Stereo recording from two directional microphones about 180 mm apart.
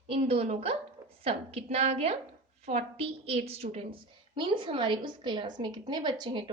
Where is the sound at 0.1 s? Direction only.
30° right (ahead or behind).